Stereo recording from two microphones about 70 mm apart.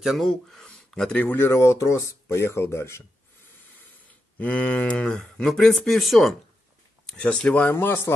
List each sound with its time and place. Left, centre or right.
0.0 s speech: centre
1.2 s speech: left
4.4 s speech: left; by 6.3 s centre
7.2 s speech: centre
7.7 s speech: left